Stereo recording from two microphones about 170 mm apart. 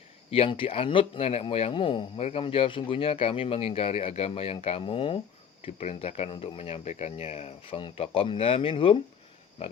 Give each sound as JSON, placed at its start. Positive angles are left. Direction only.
{"t": 0.3, "sound": "speech", "side_deg": 35}